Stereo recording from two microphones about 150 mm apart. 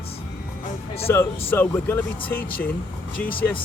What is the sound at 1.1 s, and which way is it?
Speech, 15° left (ahead or behind).